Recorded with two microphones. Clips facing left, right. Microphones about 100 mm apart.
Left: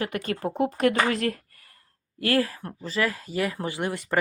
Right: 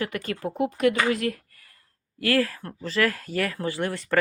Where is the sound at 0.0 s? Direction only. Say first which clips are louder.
Left 1 dB; 25° left (ahead or behind).